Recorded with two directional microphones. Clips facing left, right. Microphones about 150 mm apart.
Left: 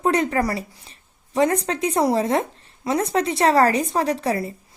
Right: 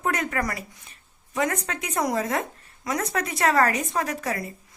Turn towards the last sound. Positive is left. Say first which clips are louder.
# left 7 dB
turn(degrees=30)  # may be behind; listen again after turning